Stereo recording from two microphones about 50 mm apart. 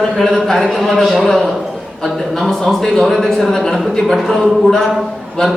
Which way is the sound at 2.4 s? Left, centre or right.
Centre.